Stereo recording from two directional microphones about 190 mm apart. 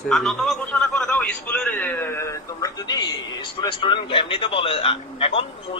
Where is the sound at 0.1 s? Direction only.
Centre (ahead or behind).